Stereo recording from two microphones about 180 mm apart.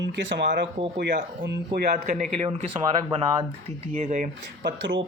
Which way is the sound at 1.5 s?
70° right (ahead or behind).